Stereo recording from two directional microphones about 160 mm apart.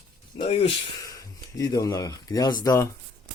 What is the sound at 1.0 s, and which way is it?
Speech, 20° left (ahead or behind).